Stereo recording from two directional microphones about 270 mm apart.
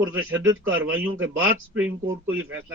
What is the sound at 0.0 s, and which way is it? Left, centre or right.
A man's voice, centre.